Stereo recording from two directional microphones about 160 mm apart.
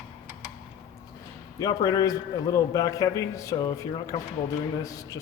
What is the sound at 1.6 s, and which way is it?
A man's voice, 25° left (ahead or behind).